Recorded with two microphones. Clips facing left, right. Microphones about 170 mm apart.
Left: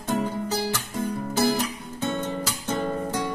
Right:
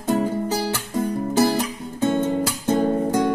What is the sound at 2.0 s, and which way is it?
Music, 50° right (ahead or behind).